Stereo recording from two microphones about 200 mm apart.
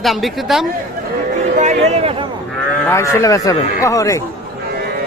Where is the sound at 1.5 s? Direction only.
35° right (ahead or behind).